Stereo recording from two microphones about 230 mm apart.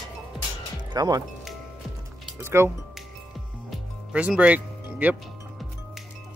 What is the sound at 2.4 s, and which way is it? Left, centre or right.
Speech, centre.